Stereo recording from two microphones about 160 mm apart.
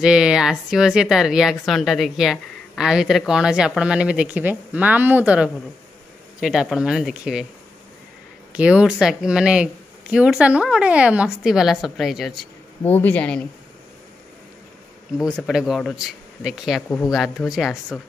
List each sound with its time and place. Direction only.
0.0 s speech: 5° right (ahead or behind)
8.5 s speech: 5° right (ahead or behind)
12.8 s speech: 10° left (ahead or behind)
15.1 s speech: 5° right (ahead or behind)